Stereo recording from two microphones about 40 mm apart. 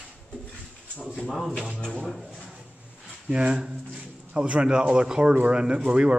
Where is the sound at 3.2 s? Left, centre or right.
Right.